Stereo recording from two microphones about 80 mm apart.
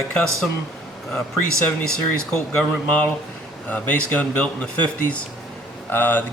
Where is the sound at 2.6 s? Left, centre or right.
Centre.